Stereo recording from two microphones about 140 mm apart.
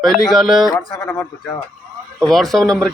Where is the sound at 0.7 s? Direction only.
30° left (ahead or behind).